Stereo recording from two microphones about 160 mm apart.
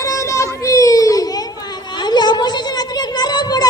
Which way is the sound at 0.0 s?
20° left (ahead or behind).